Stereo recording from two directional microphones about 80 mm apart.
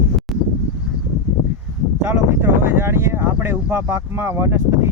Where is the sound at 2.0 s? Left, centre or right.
Right.